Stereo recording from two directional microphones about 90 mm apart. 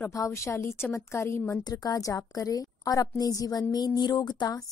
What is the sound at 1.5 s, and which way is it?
A woman's voice, 45° left (ahead or behind).